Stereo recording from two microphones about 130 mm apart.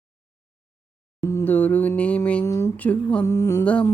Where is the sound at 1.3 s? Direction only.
15° left (ahead or behind).